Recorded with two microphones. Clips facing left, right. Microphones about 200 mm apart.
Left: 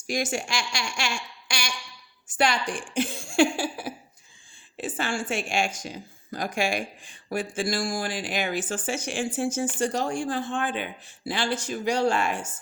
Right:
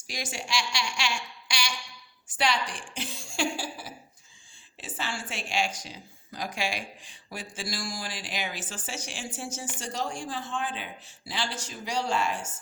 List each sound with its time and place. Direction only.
0.1 s a woman's voice: 50° left (ahead or behind)